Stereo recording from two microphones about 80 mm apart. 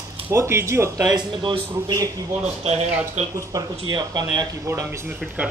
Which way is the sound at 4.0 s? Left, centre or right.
Right.